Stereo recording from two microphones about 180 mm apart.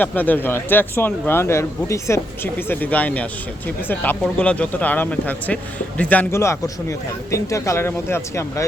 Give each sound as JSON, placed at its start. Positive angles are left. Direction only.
{"t": 0.0, "sound": "speech", "side_deg": 10}